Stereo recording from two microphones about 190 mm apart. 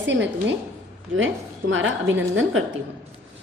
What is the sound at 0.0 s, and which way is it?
Speech, 70° right (ahead or behind).